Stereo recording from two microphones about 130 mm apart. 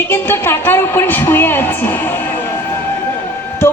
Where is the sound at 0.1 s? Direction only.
15° left (ahead or behind).